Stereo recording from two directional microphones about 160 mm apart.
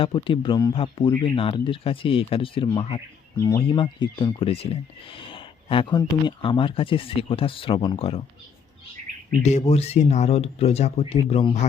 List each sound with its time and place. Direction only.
0.0 s speech: 35° left (ahead or behind)
9.4 s speech: 45° left (ahead or behind)